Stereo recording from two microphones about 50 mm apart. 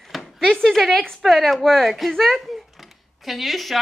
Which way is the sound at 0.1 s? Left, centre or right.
Centre.